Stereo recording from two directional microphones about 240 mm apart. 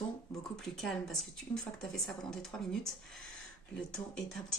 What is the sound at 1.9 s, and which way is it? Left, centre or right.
Speech, centre.